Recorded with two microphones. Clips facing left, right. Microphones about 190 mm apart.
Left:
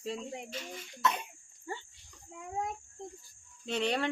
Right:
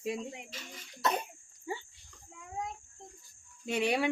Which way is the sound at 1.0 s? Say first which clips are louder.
Right 1 dB; 35° right (ahead or behind).